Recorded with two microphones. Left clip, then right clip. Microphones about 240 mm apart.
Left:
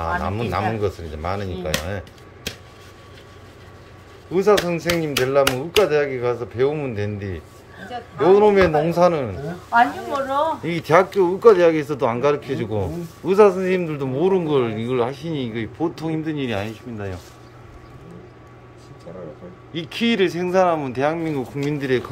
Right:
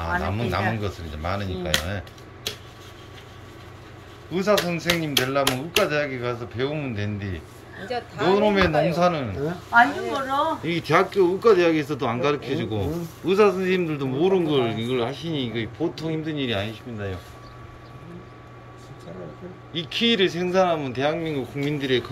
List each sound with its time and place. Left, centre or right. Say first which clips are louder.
0.5 s speech: left 5 dB; centre
4.3 s speech: left 5 dB; centre
9.7 s speech: left 1 dB; left
10.6 s speech: left 4 dB; centre
19.7 s speech: even; centre